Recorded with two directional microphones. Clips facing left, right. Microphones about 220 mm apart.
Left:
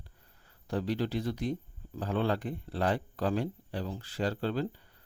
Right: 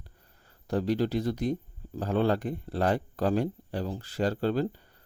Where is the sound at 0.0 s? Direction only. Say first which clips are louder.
Right 2 dB; 40° right (ahead or behind).